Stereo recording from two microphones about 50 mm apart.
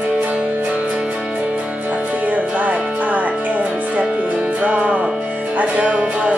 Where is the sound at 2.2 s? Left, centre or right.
Right.